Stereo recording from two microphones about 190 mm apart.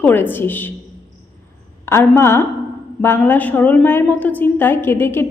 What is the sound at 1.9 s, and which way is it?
A woman's voice, 15° left (ahead or behind).